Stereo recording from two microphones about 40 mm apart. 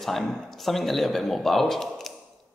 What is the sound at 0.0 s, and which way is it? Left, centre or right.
A man's voice, centre.